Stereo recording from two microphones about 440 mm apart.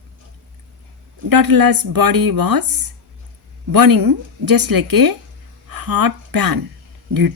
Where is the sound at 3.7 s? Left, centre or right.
Right.